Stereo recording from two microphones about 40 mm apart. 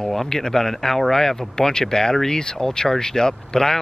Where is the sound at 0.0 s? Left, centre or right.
Centre.